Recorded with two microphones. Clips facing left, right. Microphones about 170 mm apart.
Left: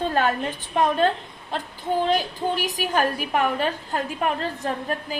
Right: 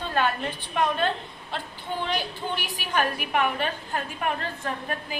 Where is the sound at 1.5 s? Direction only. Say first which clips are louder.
Left 7 dB; 40° left (ahead or behind).